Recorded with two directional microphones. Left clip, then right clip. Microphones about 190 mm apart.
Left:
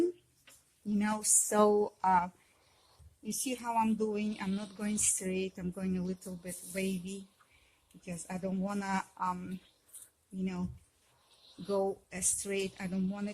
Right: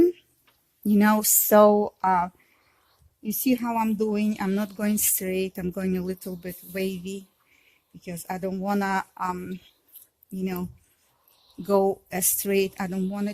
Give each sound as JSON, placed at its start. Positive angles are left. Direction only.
{"t": 0.9, "sound": "speech", "side_deg": -50}
{"t": 11.7, "sound": "speech", "side_deg": -50}